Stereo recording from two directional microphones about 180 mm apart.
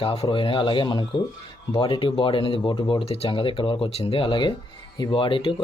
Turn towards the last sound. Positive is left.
turn(degrees=30)  # may be behind; listen again after turning